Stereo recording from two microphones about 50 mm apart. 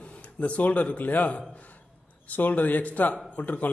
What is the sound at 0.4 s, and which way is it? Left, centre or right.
A man's voice, left.